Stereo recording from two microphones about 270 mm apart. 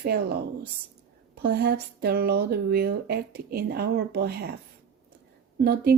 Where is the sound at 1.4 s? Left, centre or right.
Right.